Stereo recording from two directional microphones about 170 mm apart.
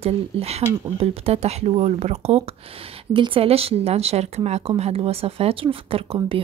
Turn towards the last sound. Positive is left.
turn(degrees=-30)  # may be behind; listen again after turning